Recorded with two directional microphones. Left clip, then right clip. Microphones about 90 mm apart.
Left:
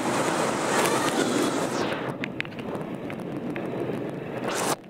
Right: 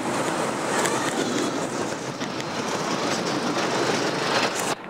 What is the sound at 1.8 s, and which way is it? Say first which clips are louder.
Wind noise: left 1 dB; 20° right (ahead or behind).